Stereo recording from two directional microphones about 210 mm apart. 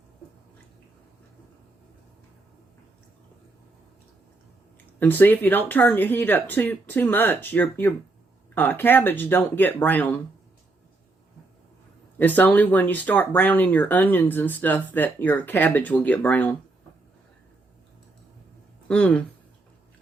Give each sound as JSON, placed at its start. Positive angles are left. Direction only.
{"t": 4.9, "sound": "speech", "side_deg": 10}
{"t": 12.2, "sound": "speech", "side_deg": 10}
{"t": 18.9, "sound": "speech", "side_deg": 5}